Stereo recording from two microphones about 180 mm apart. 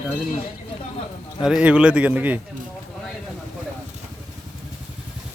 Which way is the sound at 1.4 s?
5° right (ahead or behind).